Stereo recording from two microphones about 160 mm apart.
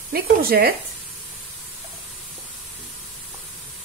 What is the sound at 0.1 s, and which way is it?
Speech, 70° right (ahead or behind).